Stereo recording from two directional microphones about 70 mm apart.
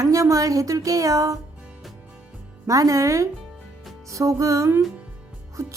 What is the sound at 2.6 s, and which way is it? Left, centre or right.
Speech, right.